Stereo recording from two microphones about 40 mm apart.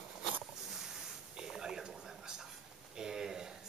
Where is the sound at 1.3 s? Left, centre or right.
Centre.